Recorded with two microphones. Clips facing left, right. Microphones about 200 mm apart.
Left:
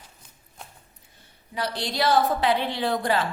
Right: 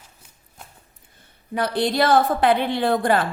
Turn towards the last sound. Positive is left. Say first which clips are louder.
# right 5 dB
turn(degrees=-55)  # may be behind; listen again after turning